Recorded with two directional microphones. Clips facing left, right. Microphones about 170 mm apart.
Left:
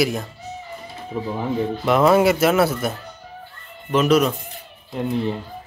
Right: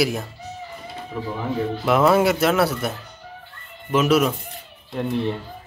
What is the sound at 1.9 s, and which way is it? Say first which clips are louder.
Speech: left 2 dB; centre (ahead or behind).